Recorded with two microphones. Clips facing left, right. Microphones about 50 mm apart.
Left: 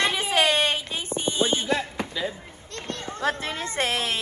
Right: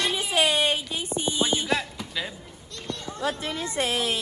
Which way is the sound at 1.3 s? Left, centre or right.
Left.